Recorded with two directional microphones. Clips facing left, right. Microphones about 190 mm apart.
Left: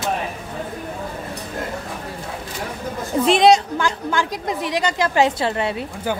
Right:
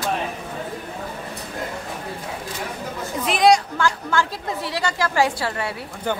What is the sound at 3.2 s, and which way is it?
A woman's voice, 25° left (ahead or behind).